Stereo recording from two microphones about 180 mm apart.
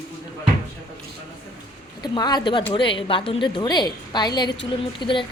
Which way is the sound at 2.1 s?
25° left (ahead or behind).